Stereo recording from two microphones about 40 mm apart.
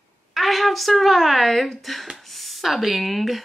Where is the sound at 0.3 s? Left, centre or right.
Centre.